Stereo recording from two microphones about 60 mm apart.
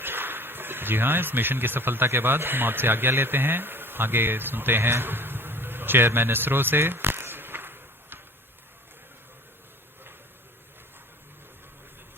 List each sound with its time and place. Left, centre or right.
0.0 s speech: right